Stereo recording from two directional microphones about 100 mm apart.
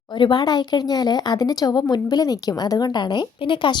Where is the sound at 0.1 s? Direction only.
50° left (ahead or behind).